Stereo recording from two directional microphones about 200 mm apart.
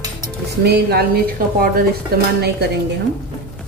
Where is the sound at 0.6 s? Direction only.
50° right (ahead or behind).